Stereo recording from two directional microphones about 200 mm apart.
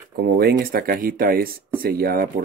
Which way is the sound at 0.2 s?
50° right (ahead or behind).